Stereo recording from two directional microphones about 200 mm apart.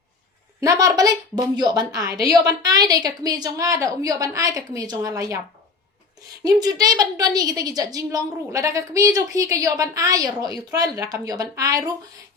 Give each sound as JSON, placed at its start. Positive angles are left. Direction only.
{"t": 0.6, "sound": "a woman's voice", "side_deg": -20}
{"t": 6.4, "sound": "a woman's voice", "side_deg": -20}